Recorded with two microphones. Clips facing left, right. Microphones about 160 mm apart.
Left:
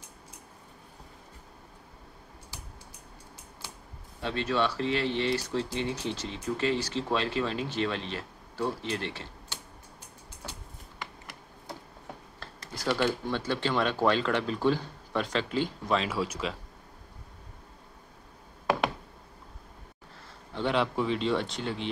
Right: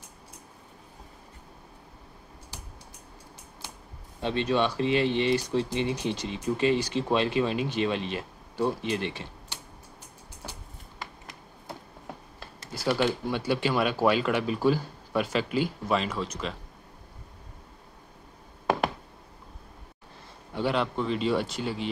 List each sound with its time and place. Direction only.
4.2 s speech: 20° right (ahead or behind)
12.4 s speech: 10° right (ahead or behind)
16.1 s speech: 5° left (ahead or behind)
20.5 s speech: 5° right (ahead or behind)